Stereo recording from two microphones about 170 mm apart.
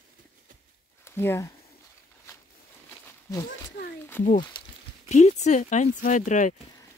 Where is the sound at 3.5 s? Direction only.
70° left (ahead or behind).